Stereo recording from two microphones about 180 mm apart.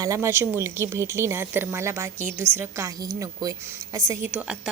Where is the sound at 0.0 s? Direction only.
15° right (ahead or behind).